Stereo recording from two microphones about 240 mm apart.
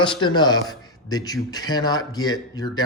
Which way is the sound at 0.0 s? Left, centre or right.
Centre.